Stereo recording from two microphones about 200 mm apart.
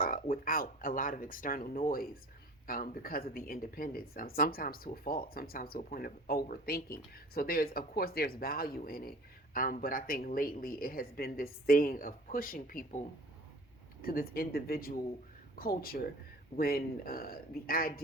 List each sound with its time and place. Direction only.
0.0 s speech: 45° left (ahead or behind)